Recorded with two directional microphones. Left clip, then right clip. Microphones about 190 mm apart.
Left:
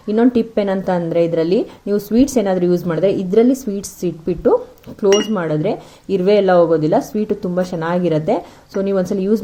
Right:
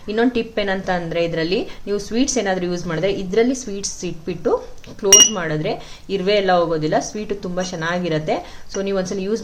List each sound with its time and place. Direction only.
0.1 s speech: 40° left (ahead or behind)